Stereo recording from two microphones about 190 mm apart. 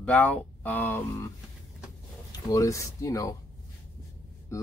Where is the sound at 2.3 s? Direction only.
15° left (ahead or behind).